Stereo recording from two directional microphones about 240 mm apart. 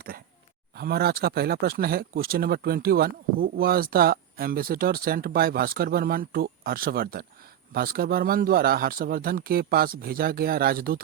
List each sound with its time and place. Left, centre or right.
0.8 s speech: right